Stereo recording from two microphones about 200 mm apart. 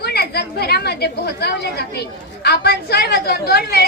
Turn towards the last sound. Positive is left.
turn(degrees=50)  # may be behind; listen again after turning